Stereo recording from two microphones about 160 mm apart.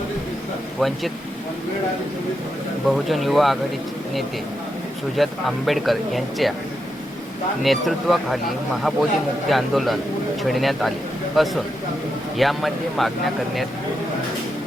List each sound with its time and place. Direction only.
0.8 s speech: centre (ahead or behind)
2.8 s speech: centre (ahead or behind)
5.1 s speech: centre (ahead or behind)
7.6 s speech: centre (ahead or behind)
9.5 s speech: centre (ahead or behind)